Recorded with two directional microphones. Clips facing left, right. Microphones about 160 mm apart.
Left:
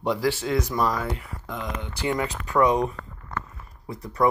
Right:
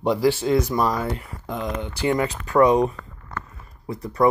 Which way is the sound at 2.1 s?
30° right (ahead or behind).